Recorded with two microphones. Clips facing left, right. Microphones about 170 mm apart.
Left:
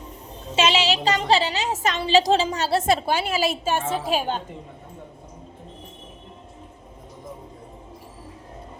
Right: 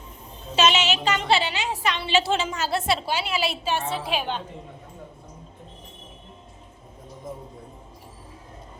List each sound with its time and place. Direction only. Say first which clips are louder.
0.5 s a woman's voice: left 1 dB; 30° left (ahead or behind)